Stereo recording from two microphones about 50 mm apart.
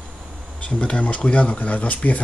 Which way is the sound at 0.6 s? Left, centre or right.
Left.